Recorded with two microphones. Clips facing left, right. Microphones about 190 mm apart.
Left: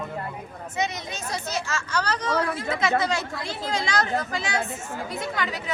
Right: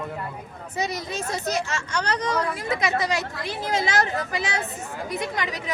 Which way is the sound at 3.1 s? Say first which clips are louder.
Right 1 dB; 20° right (ahead or behind).